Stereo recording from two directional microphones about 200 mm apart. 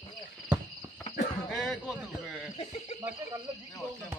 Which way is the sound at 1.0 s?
45° left (ahead or behind).